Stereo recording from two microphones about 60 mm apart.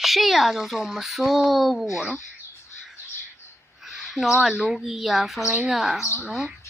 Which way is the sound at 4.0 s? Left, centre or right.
Centre.